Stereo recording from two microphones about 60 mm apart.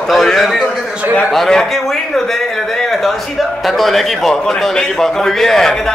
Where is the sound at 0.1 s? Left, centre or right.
Centre.